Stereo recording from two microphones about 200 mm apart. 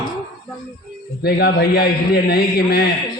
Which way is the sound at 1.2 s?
50° left (ahead or behind).